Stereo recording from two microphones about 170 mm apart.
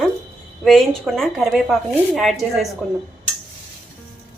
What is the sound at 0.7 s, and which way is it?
A woman's voice, centre (ahead or behind).